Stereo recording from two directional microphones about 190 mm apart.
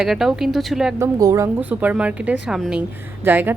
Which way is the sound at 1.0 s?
15° right (ahead or behind).